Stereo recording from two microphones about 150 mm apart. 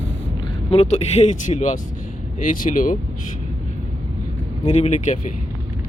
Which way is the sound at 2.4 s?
65° left (ahead or behind).